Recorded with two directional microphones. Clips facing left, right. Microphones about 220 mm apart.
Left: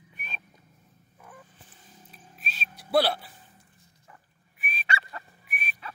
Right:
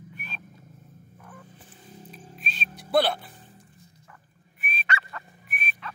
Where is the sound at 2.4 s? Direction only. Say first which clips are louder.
Right 1 dB; 5° left (ahead or behind).